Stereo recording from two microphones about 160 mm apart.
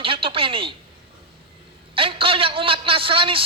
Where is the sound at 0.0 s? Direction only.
35° right (ahead or behind).